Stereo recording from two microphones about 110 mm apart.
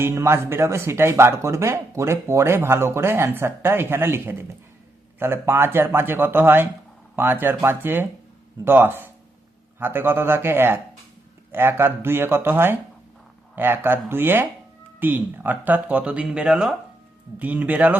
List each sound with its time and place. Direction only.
0.0 s speech: 20° right (ahead or behind)